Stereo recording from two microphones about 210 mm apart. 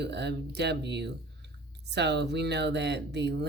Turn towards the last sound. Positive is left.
turn(degrees=-55)  # may be behind; listen again after turning